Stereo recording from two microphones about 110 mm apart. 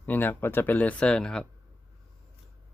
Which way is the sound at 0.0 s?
15° left (ahead or behind).